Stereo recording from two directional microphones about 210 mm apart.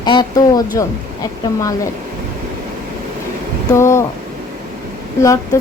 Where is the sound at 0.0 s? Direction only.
20° left (ahead or behind).